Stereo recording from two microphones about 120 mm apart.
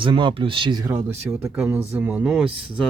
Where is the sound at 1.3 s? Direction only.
20° right (ahead or behind).